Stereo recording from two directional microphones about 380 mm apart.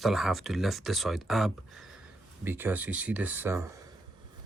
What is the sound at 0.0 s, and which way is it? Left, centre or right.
Speech, centre.